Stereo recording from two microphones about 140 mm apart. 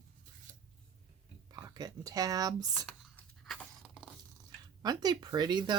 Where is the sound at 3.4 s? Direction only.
Centre (ahead or behind).